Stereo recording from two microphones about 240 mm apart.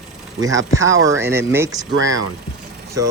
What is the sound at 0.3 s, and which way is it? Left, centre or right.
Speech, centre.